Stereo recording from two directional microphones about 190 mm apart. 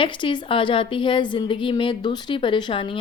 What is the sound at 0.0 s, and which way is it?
A woman's voice, 25° left (ahead or behind).